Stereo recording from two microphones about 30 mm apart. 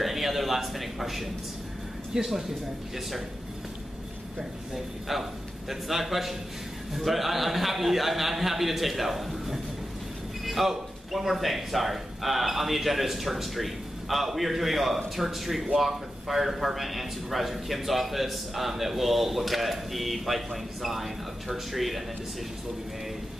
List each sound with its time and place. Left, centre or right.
0.0 s a man's voice: centre
2.1 s speech: centre
4.4 s a man's voice: centre